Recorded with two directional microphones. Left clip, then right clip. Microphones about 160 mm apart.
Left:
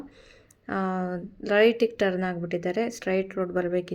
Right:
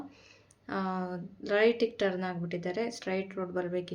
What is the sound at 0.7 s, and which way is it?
Speech, 35° left (ahead or behind).